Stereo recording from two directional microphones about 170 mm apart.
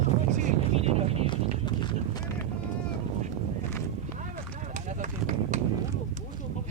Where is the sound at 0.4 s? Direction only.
40° right (ahead or behind).